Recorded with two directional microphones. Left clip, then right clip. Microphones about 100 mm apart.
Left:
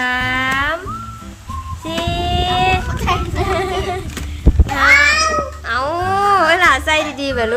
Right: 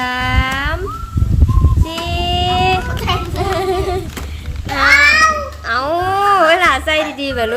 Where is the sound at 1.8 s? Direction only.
25° right (ahead or behind).